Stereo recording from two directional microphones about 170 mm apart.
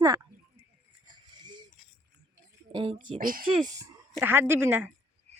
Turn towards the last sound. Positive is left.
turn(degrees=-10)  # may be behind; listen again after turning